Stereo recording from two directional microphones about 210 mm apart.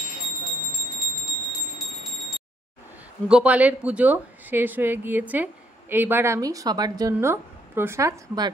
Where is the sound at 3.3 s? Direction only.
5° right (ahead or behind).